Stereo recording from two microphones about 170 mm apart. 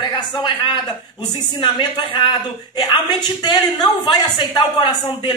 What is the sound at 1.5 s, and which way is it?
A woman's voice, 25° left (ahead or behind).